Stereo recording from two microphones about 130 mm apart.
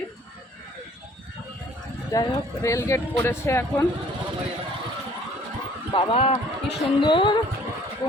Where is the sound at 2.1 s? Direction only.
25° left (ahead or behind).